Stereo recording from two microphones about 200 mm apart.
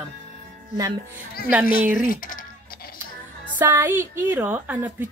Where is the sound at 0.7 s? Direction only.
15° right (ahead or behind).